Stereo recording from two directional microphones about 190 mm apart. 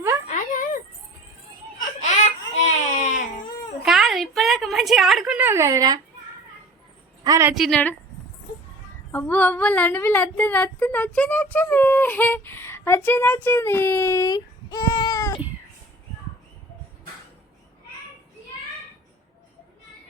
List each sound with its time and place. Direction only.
0.3 s a sound: 45° left (ahead or behind)
2.0 s baby cry: 40° left (ahead or behind)
3.8 s a sound: centre (ahead or behind); by 6.0 s 20° right (ahead or behind)
7.3 s a woman's voice: 15° right (ahead or behind)
7.5 s speech: centre (ahead or behind)
9.1 s speech: 10° left (ahead or behind)